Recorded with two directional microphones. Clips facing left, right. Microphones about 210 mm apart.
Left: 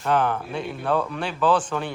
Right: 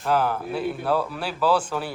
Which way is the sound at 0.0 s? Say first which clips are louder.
Even; 5° right (ahead or behind).